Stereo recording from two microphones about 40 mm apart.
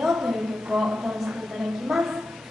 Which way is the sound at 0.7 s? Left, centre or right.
Right.